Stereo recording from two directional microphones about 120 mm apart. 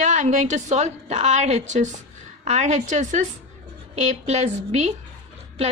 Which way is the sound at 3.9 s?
65° right (ahead or behind).